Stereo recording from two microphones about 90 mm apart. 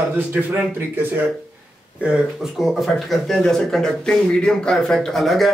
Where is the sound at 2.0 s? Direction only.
10° right (ahead or behind).